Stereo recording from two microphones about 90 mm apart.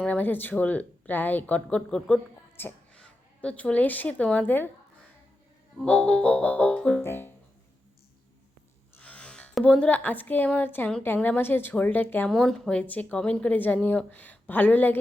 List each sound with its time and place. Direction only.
0.0 s speech: 15° left (ahead or behind)
2.6 s a woman's voice: 25° left (ahead or behind)
2.9 s a woman's voice: 10° left (ahead or behind)
5.8 s speech: 15° left (ahead or behind)
7.0 s a woman's voice: 25° left (ahead or behind)
9.0 s a sound: 15° left (ahead or behind)
9.6 s a woman's voice: 10° left (ahead or behind)
12.3 s speech: 5° left (ahead or behind); by 14.9 s 20° left (ahead or behind)